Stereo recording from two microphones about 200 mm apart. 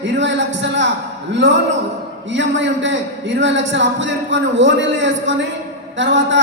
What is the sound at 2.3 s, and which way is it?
A man's voice, 65° right (ahead or behind).